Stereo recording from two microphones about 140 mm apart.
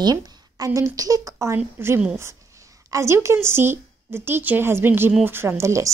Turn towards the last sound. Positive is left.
turn(degrees=-20)  # may be behind; listen again after turning